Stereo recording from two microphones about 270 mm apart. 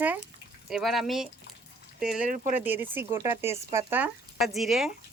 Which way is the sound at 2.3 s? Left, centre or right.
Right.